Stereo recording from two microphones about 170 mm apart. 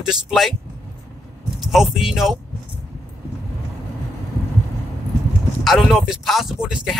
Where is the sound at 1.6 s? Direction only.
Centre (ahead or behind).